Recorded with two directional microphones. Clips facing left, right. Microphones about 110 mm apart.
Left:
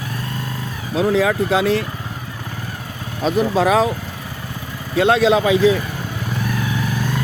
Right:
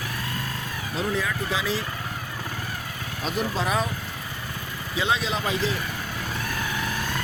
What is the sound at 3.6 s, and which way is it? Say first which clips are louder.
Speech: left 11 dB; 90° left.